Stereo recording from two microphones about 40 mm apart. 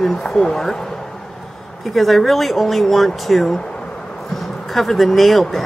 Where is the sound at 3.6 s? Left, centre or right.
Left.